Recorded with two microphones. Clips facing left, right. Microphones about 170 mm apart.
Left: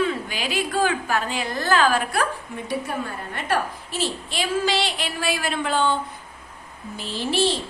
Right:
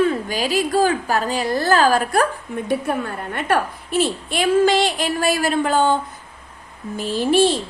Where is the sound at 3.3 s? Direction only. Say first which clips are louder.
Right 4 dB; 55° right (ahead or behind).